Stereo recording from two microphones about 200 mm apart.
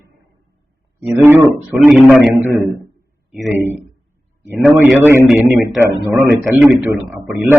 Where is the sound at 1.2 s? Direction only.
10° right (ahead or behind).